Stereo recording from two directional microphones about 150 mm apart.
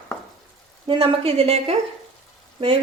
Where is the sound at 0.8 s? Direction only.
40° right (ahead or behind).